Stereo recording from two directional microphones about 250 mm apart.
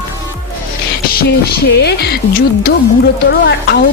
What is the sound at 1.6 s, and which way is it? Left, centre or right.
A woman's voice, left.